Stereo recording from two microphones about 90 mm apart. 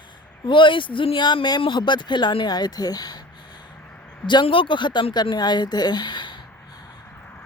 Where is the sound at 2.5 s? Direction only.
50° left (ahead or behind).